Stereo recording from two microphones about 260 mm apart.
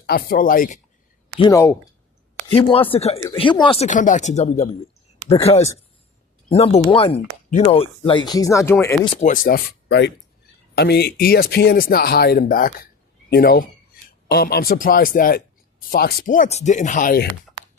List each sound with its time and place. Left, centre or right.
0.0 s speech: left
1.4 s speech: centre
9.0 s speech: left